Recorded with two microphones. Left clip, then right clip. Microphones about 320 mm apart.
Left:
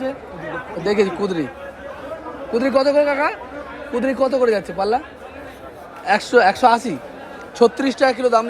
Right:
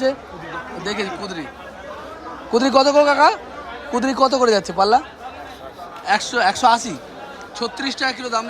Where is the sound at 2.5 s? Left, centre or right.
Centre.